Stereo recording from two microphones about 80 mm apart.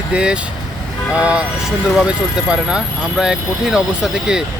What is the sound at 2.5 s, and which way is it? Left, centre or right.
Speech, centre.